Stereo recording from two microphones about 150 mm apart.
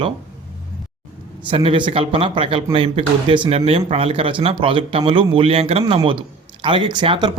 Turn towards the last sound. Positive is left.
turn(degrees=-30)  # may be behind; listen again after turning